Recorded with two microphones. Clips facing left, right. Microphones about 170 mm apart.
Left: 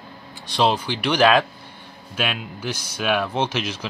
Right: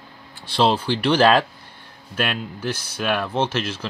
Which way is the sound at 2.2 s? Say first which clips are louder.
Right 2 dB; 5° left (ahead or behind).